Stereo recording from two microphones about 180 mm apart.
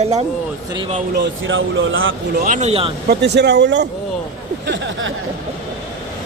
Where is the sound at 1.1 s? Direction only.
85° right.